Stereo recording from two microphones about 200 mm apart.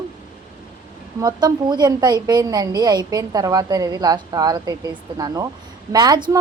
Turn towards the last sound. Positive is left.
turn(degrees=-20)  # may be behind; listen again after turning